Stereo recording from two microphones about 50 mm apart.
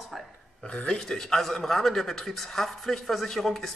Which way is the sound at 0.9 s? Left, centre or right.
Centre.